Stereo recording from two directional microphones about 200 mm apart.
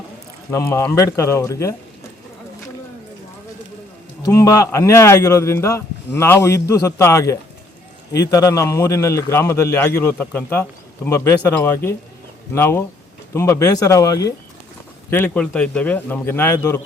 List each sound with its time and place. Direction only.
0.7 s a man's voice: 15° left (ahead or behind)
4.3 s a man's voice: 15° left (ahead or behind)